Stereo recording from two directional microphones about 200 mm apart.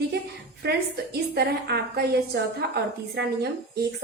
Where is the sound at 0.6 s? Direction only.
55° right (ahead or behind).